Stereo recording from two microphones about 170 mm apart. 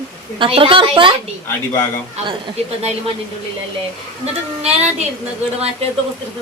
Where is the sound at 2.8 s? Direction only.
40° right (ahead or behind).